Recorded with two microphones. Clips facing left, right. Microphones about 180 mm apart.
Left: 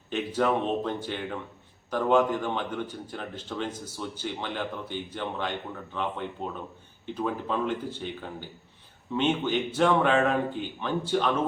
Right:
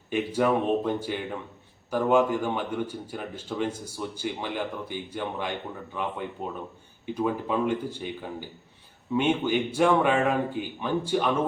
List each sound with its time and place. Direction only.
0.1 s a man's voice: 10° right (ahead or behind)